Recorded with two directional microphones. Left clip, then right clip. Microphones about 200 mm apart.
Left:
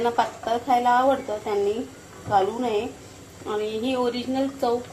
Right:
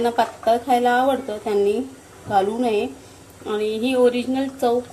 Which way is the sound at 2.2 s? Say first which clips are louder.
Right 2 dB; 35° right (ahead or behind).